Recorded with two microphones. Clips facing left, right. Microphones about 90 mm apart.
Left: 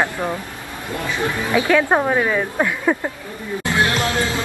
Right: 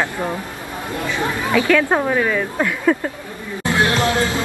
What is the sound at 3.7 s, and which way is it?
Music, 20° right (ahead or behind).